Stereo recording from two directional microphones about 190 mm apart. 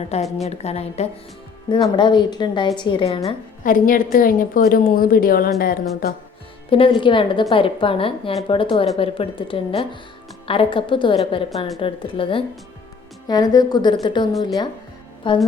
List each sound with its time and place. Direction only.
0.1 s a woman's voice: 35° left (ahead or behind)
1.7 s a woman's voice: 25° left (ahead or behind)
3.6 s a woman's voice: 45° left (ahead or behind)
6.7 s a woman's voice: 25° left (ahead or behind)